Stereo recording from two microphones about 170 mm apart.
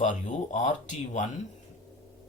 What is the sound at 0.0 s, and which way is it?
Speech, 45° left (ahead or behind).